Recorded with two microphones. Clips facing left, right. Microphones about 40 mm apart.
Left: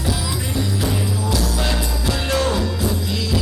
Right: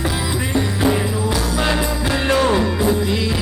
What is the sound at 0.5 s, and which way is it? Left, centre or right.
Music, right.